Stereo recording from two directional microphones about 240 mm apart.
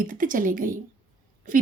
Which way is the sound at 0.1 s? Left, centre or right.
Right.